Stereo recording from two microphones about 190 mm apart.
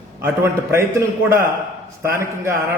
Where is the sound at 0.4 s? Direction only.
15° right (ahead or behind).